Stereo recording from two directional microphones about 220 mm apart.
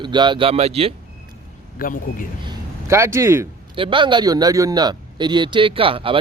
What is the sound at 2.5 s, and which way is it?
A man's voice, 10° right (ahead or behind).